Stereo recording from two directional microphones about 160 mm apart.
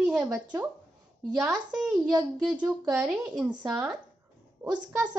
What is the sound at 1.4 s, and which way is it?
Speech, 5° right (ahead or behind).